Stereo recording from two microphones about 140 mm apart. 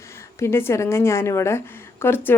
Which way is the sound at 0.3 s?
20° left (ahead or behind).